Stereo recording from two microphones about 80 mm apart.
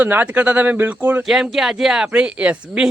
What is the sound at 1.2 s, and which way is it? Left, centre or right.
Speech, centre.